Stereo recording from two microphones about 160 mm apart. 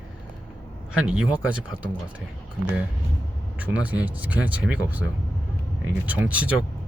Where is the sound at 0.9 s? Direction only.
5° right (ahead or behind).